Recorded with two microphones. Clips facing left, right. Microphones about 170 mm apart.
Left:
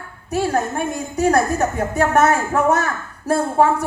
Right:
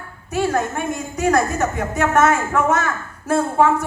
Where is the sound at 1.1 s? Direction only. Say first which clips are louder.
Left 1 dB; 35° left (ahead or behind).